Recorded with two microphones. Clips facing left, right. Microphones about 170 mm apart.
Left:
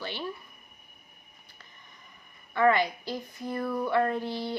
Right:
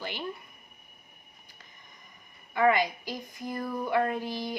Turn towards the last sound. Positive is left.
turn(degrees=-15)  # may be behind; listen again after turning